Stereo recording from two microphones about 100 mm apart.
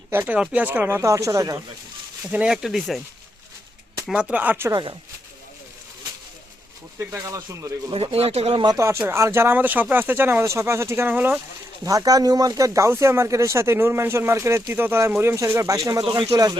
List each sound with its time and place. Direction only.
0.1 s speech: 20° right (ahead or behind)
2.3 s speech: 10° right (ahead or behind)
4.1 s speech: 15° right (ahead or behind)
4.7 s speech: 50° right (ahead or behind)
7.1 s speech: 35° right (ahead or behind)
7.9 s speech: 80° right
8.7 s speech: 30° right (ahead or behind)
11.9 s speech: 35° right (ahead or behind)